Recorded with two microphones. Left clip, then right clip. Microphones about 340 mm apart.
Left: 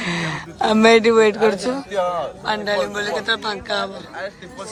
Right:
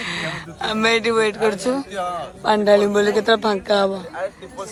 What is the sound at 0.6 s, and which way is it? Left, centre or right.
Speech, centre.